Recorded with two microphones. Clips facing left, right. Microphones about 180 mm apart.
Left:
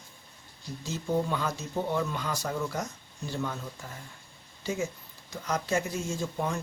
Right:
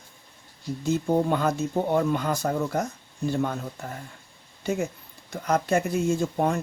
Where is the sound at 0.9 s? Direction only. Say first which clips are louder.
Right 6 dB; 55° right (ahead or behind).